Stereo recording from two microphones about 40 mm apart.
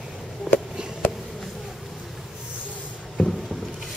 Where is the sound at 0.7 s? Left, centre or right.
Right.